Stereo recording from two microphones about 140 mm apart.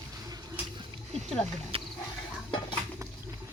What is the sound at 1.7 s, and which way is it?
Wild animals, 40° right (ahead or behind).